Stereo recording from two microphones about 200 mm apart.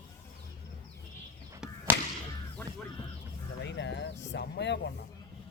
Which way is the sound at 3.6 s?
60° left (ahead or behind).